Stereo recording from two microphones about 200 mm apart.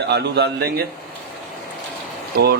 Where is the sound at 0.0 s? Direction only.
55° right (ahead or behind).